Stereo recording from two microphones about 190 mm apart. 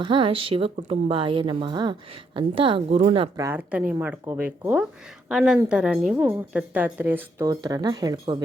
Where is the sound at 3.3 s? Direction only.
15° right (ahead or behind).